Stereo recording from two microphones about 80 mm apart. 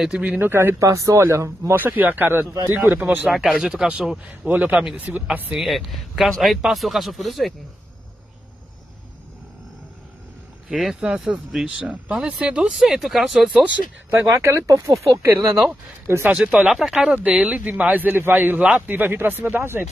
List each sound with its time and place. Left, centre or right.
0.0 s speech: centre
0.4 s speech: right
0.7 s speech: right
1.8 s speech: right
3.3 s speech: centre
4.3 s speech: right
5.6 s a man's voice: centre
10.7 s a man's voice: centre
14.3 s speech: right
16.1 s speech: right
16.3 s speech: centre; by 19.8 s right